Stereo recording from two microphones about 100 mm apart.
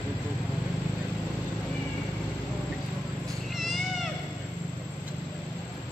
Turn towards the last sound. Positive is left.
turn(degrees=0)  # may be behind; listen again after turning